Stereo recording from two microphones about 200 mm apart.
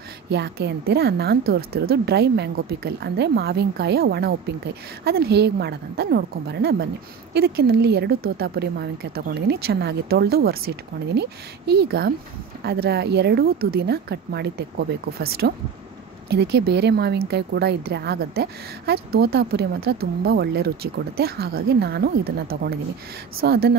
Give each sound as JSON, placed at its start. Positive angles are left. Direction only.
{"t": 0.3, "sound": "a woman's voice", "side_deg": -55}